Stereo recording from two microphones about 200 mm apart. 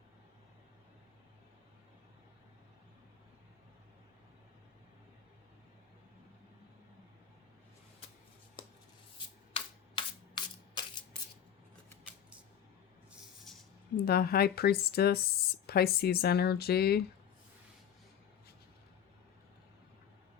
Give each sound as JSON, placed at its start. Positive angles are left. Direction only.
{"t": 9.1, "sound": "shuffling cards", "side_deg": 25}
{"t": 13.1, "sound": "a sound", "side_deg": 0}
{"t": 13.9, "sound": "speech", "side_deg": 50}